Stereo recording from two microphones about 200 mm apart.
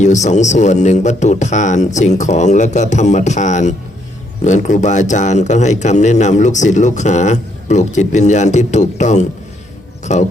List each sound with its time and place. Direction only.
0.0 s a man's voice: 35° left (ahead or behind)